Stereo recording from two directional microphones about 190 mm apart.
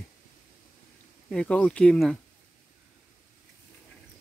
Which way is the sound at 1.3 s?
5° left (ahead or behind).